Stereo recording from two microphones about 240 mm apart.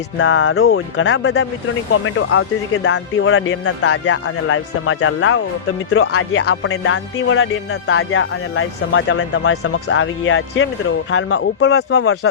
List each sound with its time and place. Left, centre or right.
0.2 s speech: left